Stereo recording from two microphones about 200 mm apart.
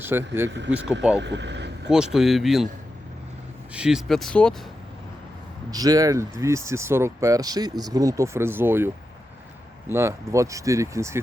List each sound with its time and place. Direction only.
0.0 s speech: 10° right (ahead or behind)
1.2 s speech: 60° right (ahead or behind)
2.1 s speech: centre (ahead or behind)
3.7 s speech: 5° right (ahead or behind)
5.7 s speech: 20° right (ahead or behind)
9.9 s speech: 15° right (ahead or behind)